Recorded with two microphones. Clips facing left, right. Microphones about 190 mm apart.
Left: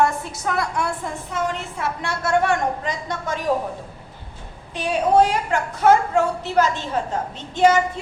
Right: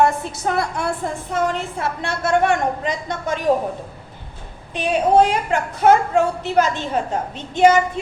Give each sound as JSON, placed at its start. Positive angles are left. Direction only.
{"t": 0.0, "sound": "a woman's voice", "side_deg": -25}
{"t": 4.7, "sound": "a woman's voice", "side_deg": -20}